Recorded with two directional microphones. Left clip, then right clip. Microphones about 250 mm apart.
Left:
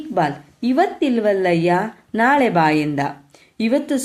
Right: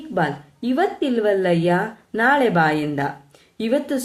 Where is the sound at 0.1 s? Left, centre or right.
Left.